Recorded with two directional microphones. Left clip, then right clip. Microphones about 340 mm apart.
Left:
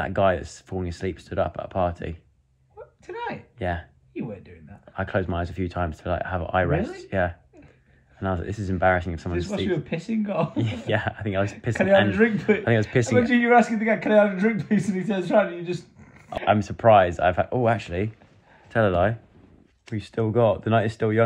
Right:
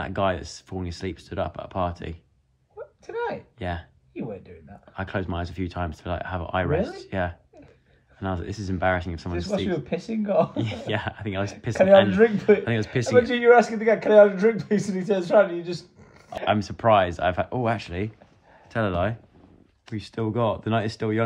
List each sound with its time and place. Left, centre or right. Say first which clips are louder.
0.0 s speech: left 4 dB; centre
2.8 s a sound: right 4 dB; right
3.5 s speech: left 3 dB; centre
4.1 s speech: even; right
4.9 s speech: left 4 dB; centre
9.3 s speech: even; right
10.6 s speech: left 2 dB; centre
12.1 s speech: right 3 dB; right
12.6 s speech: left 5 dB; centre
13.2 s speech: left 1 dB; right
13.5 s speech: right 4 dB; centre